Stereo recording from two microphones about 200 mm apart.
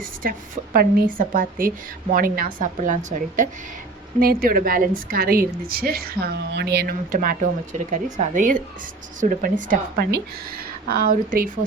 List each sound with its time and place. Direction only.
0.0 s a woman's voice: 45° right (ahead or behind)